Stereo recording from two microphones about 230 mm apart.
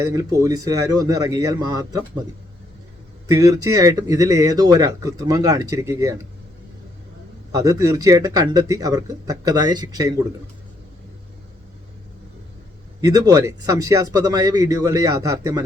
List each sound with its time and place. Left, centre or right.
0.0 s speech: centre
3.2 s speech: centre
7.5 s speech: centre
13.0 s speech: centre